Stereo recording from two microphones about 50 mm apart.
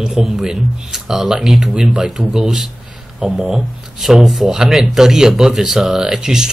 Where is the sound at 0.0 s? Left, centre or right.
Centre.